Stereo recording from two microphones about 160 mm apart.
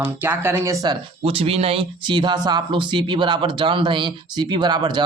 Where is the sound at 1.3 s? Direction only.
35° right (ahead or behind).